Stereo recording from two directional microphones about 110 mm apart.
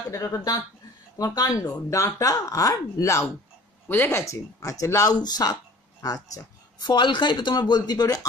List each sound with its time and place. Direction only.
0.1 s speech: 30° left (ahead or behind)